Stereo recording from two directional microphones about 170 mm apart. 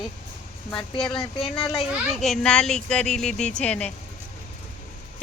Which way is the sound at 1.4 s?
25° left (ahead or behind).